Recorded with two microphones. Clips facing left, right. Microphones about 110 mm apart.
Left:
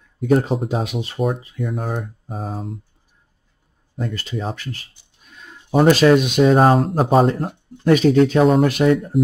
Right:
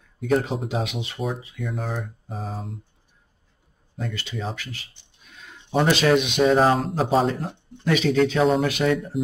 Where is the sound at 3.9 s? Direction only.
45° left (ahead or behind).